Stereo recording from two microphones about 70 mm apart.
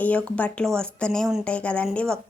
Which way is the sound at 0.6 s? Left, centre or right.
Centre.